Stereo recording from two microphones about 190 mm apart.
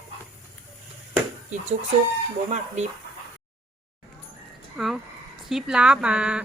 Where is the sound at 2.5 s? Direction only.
35° right (ahead or behind).